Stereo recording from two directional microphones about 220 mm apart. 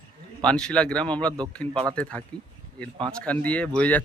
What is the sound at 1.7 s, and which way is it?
Speech, 20° right (ahead or behind).